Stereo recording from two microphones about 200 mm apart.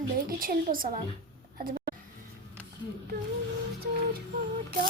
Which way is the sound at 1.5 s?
45° right (ahead or behind).